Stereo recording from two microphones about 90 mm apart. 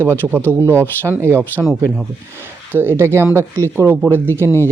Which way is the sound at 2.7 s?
25° right (ahead or behind).